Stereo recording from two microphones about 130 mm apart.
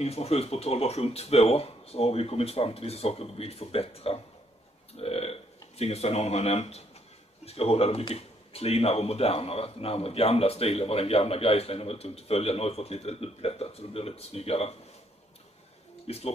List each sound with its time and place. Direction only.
0.0 s speech: 50° left (ahead or behind)
16.1 s speech: 50° left (ahead or behind)